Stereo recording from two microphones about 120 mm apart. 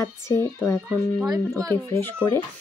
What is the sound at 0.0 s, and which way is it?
Speech, 25° left (ahead or behind).